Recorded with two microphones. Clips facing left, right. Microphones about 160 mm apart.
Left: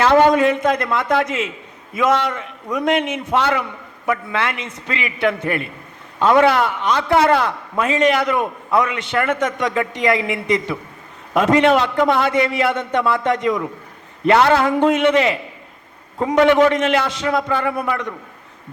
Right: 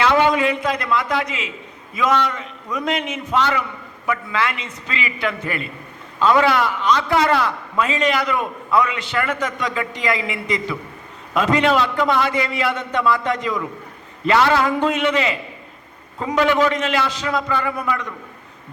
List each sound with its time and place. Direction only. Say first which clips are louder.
0.0 s a man's voice: left 4 dB; 45° left (ahead or behind)